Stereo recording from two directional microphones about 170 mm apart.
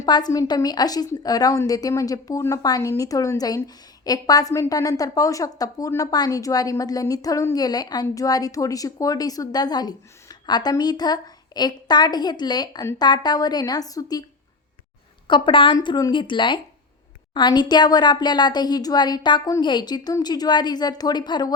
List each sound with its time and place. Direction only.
0.0 s a woman's voice: 25° left (ahead or behind)
15.3 s a woman's voice: 30° left (ahead or behind)